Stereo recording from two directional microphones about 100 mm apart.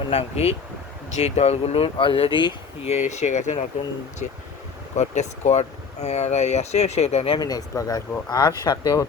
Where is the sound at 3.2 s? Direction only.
90° left.